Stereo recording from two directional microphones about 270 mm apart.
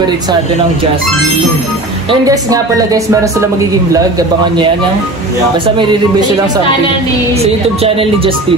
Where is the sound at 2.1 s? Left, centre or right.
Centre.